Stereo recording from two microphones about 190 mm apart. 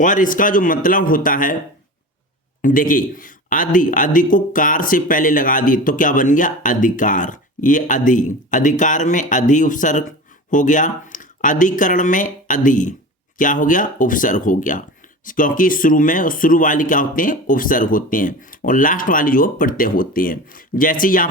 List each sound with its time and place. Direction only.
0.0 s speech: 45° left (ahead or behind)
2.6 s speech: 45° left (ahead or behind)